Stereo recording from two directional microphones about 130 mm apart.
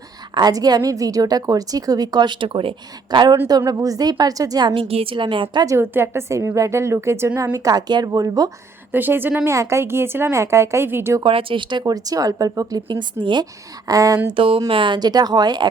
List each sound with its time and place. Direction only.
0.3 s a woman's voice: 30° right (ahead or behind)
5.6 s a woman's voice: 20° right (ahead or behind)
8.9 s a woman's voice: 15° right (ahead or behind)
11.2 s a woman's voice: 45° right (ahead or behind); by 14.2 s 25° right (ahead or behind)
14.3 s a woman's voice: 45° right (ahead or behind)